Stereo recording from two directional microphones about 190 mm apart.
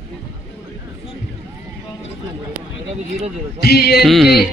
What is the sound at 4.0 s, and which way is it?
Music, centre (ahead or behind).